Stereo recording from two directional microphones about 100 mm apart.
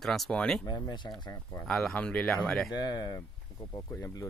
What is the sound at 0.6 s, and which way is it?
Speech, 45° left (ahead or behind).